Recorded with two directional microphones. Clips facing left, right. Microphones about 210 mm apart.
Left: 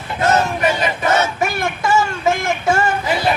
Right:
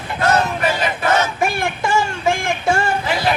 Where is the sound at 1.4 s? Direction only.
30° right (ahead or behind).